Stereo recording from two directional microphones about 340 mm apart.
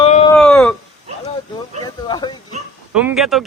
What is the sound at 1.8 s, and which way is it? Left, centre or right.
Speech, centre.